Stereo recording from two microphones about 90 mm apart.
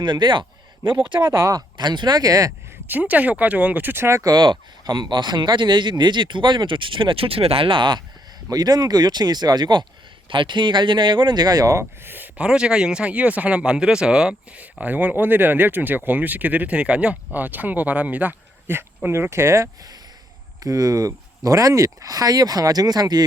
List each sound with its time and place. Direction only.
0.0 s speech: 60° right (ahead or behind)
1.3 s speech: 30° right (ahead or behind)
1.5 s speech: 55° right (ahead or behind)
2.8 s speech: 20° right (ahead or behind)
4.2 s speech: 45° right (ahead or behind)
4.4 s speech: 55° right (ahead or behind)
8.4 s speech: 45° right (ahead or behind)
10.2 s speech: 65° right (ahead or behind); by 11.9 s 35° right (ahead or behind)
12.0 s speech: 20° right (ahead or behind)
20.7 s speech: 40° right (ahead or behind)